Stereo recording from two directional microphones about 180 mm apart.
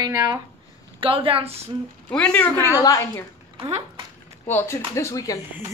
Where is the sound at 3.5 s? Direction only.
30° right (ahead or behind).